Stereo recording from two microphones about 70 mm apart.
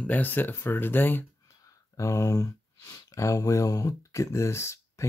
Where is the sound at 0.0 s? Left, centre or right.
Left.